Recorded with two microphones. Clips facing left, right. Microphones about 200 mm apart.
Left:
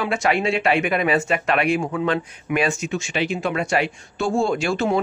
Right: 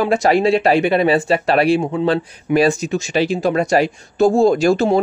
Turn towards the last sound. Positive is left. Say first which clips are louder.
# right 7 dB
turn(degrees=-40)  # may be behind; listen again after turning